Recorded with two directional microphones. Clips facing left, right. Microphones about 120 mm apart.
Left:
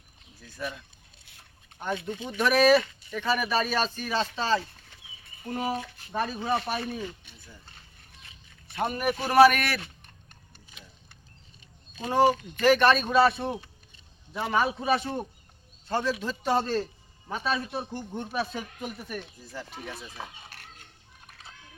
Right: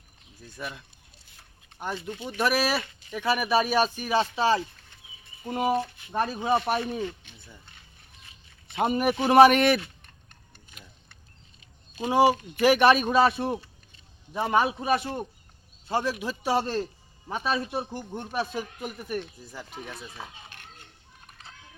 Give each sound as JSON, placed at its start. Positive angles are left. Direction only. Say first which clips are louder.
{"t": 1.8, "sound": "speech", "louder": "left 1 dB", "side_deg": -5}
{"t": 8.7, "sound": "a man's voice", "louder": "right 4 dB", "side_deg": -20}
{"t": 11.9, "sound": "speech", "louder": "right 2 dB", "side_deg": -10}
{"t": 19.9, "sound": "speech", "louder": "left 1 dB", "side_deg": 10}